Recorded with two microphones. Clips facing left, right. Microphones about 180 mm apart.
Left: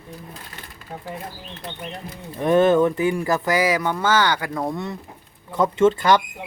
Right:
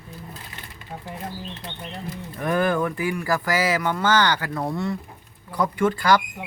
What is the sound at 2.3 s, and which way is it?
Speech, 25° left (ahead or behind).